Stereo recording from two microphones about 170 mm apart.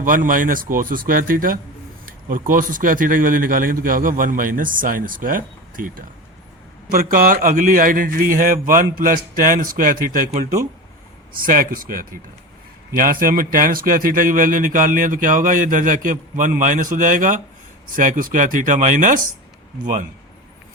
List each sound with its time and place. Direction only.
0.0 s a man's voice: 50° right (ahead or behind)
6.9 s a man's voice: 55° right (ahead or behind)